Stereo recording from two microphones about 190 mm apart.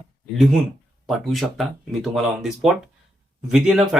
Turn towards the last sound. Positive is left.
turn(degrees=-5)  # may be behind; listen again after turning